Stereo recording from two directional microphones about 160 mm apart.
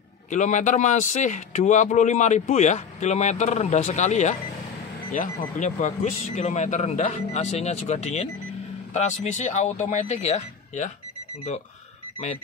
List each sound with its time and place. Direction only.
0.3 s speech: 50° left (ahead or behind)